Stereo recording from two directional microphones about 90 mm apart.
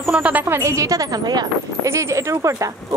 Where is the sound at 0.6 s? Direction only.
35° right (ahead or behind).